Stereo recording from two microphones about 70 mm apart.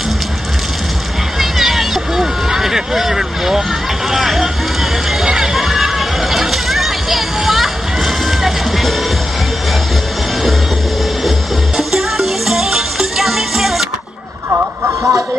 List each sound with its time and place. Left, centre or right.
1.4 s a sound: centre
4.1 s speech: centre
5.2 s a sound: centre
8.4 s music: centre
11.2 s music: centre
14.5 s vehicle: right